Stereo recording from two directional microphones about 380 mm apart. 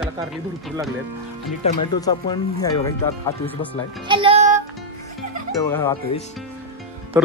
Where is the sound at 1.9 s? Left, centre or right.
Centre.